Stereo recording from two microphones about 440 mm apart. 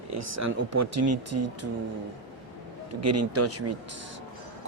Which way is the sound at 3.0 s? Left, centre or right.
Right.